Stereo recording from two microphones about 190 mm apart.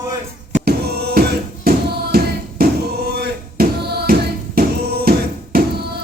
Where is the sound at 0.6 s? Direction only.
55° right (ahead or behind).